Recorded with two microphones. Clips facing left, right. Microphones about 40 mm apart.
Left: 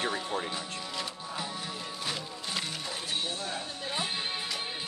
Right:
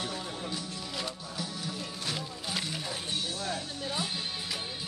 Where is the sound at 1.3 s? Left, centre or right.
Left.